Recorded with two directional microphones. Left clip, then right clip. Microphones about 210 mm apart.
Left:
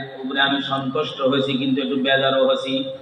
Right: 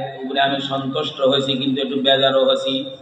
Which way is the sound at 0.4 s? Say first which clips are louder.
Right 1 dB; 10° left (ahead or behind).